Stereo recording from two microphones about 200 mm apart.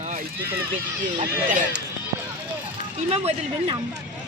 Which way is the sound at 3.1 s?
30° right (ahead or behind).